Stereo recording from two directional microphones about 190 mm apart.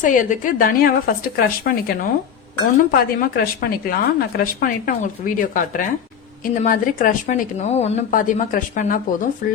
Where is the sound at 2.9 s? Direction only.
55° left (ahead or behind).